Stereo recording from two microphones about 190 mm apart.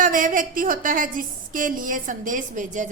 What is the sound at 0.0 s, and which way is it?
A woman's voice, 45° right (ahead or behind).